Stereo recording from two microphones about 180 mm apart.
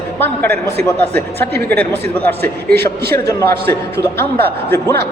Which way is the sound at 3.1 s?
15° left (ahead or behind).